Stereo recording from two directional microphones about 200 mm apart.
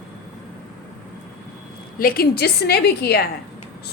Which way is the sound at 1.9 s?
45° left (ahead or behind).